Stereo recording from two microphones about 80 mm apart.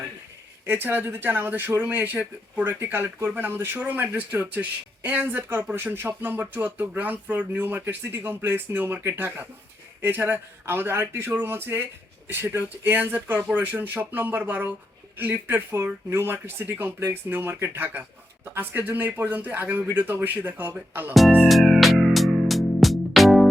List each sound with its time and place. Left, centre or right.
0.6 s speech: right
21.4 s music: centre